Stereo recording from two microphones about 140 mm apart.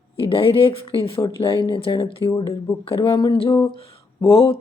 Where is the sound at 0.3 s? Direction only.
40° left (ahead or behind).